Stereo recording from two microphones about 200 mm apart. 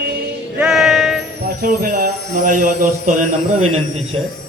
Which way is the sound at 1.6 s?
45° right (ahead or behind).